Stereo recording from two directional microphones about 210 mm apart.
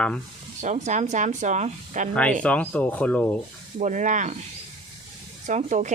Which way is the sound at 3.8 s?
35° right (ahead or behind).